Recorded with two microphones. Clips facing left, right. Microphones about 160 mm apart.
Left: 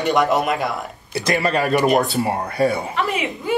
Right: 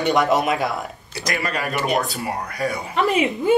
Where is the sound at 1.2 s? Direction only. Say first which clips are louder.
Left 6 dB; 30° left (ahead or behind).